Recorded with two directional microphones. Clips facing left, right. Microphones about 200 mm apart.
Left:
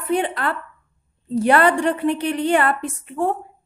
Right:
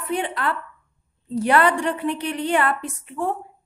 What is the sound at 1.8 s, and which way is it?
A woman's voice, 50° left (ahead or behind).